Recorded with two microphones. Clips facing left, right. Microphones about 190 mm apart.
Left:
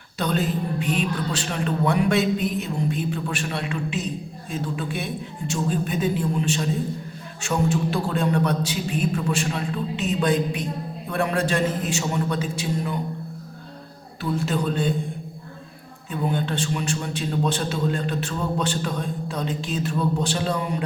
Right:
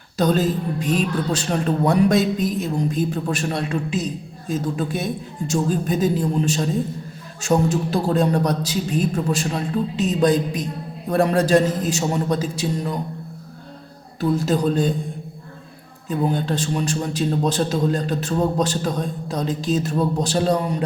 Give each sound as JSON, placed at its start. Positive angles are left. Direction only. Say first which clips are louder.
{"t": 0.2, "sound": "a man's voice", "louder": "right 5 dB", "side_deg": -40}
{"t": 14.2, "sound": "a man's voice", "louder": "right 5 dB", "side_deg": -40}
{"t": 16.0, "sound": "a man's voice", "louder": "right 4 dB", "side_deg": -35}